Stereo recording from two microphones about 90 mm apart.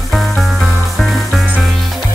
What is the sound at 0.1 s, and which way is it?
Music, centre (ahead or behind).